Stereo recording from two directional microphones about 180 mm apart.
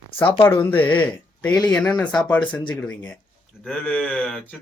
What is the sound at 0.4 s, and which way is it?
Speech, 10° left (ahead or behind).